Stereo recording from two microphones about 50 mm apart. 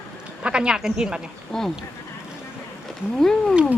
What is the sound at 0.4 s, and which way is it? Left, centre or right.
Speech, centre.